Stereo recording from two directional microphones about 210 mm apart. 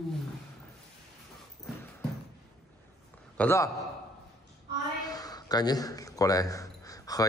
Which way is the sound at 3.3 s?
10° left (ahead or behind).